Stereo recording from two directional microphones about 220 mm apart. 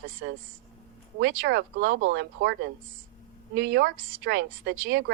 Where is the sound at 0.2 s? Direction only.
50° right (ahead or behind).